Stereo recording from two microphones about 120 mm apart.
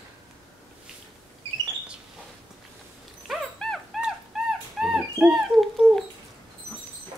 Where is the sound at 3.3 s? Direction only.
5° left (ahead or behind).